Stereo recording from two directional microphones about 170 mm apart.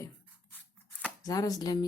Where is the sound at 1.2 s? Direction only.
20° left (ahead or behind).